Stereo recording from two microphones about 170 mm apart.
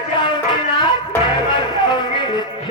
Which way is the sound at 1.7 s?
25° left (ahead or behind).